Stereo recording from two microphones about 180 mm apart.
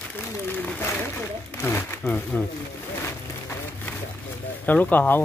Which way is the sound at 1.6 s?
15° left (ahead or behind).